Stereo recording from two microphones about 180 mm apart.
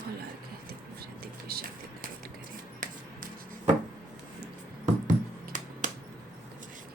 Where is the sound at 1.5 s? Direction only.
60° right (ahead or behind).